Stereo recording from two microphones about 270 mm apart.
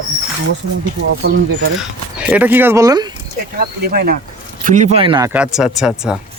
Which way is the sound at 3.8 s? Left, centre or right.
Right.